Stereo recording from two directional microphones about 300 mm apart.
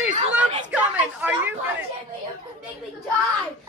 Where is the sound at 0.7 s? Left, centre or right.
Centre.